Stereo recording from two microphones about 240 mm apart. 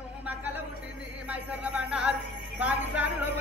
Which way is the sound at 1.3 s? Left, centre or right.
Centre.